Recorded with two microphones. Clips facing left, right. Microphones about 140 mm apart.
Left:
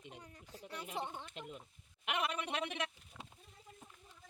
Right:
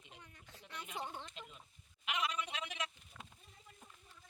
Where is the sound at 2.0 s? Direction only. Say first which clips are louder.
Left 2 dB; 55° left (ahead or behind).